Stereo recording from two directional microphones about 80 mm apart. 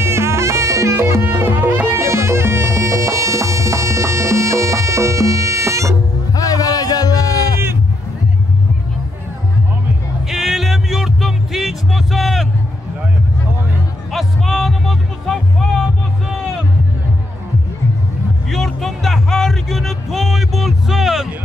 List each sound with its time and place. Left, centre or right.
0.0 s music: right
1.9 s music: right
6.3 s music: left
10.3 s music: centre
14.1 s music: centre
18.5 s music: centre